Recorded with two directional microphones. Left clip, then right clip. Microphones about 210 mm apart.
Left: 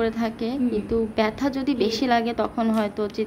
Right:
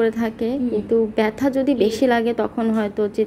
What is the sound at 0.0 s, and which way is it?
A woman's voice, 15° right (ahead or behind).